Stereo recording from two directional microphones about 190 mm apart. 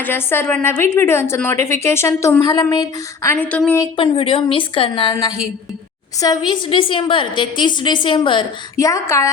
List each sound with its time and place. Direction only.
0.0 s a woman's voice: 10° left (ahead or behind)
3.3 s a woman's voice: 5° left (ahead or behind)
3.9 s a woman's voice: 30° left (ahead or behind)